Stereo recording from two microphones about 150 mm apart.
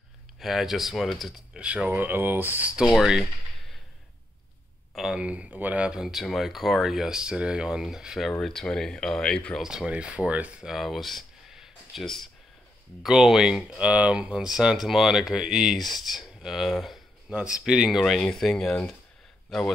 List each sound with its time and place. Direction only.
0.4 s speech: centre (ahead or behind)
4.9 s speech: 5° right (ahead or behind)